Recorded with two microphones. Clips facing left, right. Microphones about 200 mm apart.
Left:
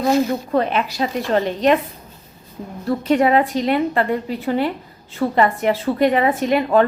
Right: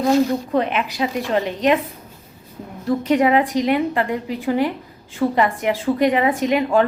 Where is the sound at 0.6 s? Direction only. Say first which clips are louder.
Left 2 dB; 35° left (ahead or behind).